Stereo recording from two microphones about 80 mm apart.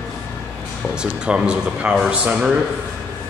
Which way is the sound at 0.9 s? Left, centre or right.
Centre.